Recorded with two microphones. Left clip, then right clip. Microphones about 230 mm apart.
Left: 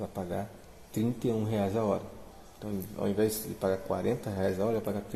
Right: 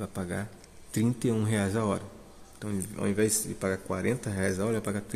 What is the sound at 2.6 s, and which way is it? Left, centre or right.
Speech, right.